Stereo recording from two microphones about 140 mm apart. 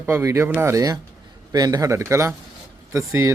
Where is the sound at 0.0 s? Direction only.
15° right (ahead or behind).